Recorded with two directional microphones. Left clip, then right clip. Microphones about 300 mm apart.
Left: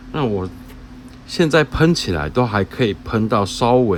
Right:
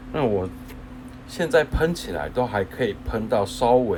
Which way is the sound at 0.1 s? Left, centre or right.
Centre.